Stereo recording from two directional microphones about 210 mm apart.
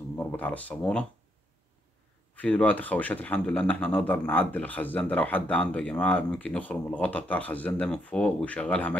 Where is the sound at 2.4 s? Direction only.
5° left (ahead or behind).